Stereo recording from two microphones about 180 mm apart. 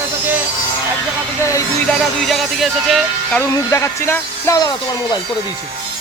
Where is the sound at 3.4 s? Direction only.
15° left (ahead or behind).